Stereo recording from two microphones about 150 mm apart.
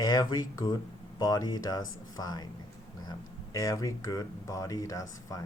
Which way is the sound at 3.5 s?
25° left (ahead or behind).